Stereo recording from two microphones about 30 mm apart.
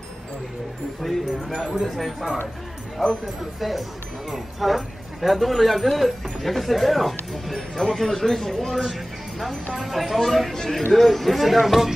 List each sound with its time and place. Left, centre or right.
1.0 s speech: centre
1.5 s speech: left
1.8 s speech: centre
3.0 s speech: centre
10.5 s speech: centre
10.9 s speech: centre